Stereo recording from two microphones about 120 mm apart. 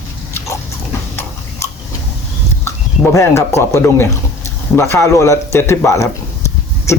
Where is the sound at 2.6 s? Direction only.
20° left (ahead or behind).